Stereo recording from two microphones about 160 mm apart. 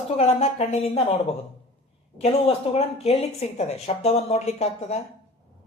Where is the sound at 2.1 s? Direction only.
40° left (ahead or behind).